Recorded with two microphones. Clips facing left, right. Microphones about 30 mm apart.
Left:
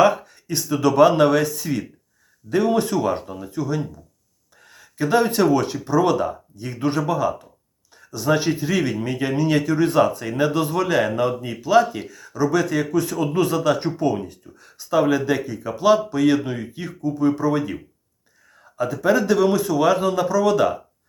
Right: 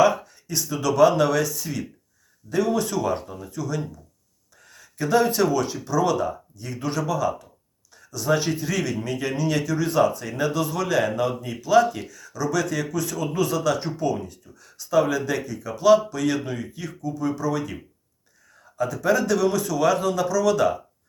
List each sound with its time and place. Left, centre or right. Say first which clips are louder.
0.0 s speech: left 2 dB; left
4.5 s a sound: left 4 dB; left
5.0 s speech: left 2 dB; left
18.8 s speech: left 3 dB; left